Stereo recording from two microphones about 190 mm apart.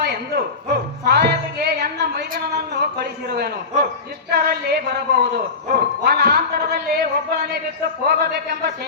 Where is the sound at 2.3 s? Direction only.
55° right (ahead or behind).